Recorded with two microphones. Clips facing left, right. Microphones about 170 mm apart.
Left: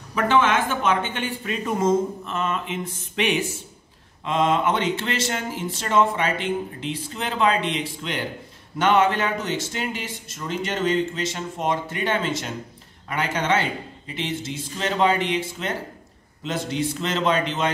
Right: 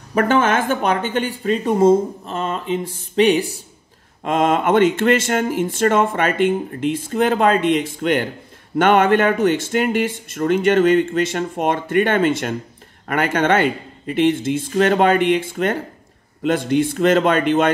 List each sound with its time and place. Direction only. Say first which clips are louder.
0.1 s speech: right 4 dB; 45° right (ahead or behind)
4.2 s speech: right 4 dB; 50° right (ahead or behind)